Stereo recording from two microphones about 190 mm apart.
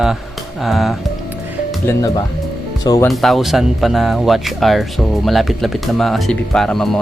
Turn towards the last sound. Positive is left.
turn(degrees=0)  # may be behind; listen again after turning